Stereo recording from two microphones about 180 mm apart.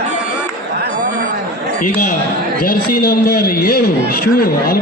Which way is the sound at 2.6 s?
50° left (ahead or behind).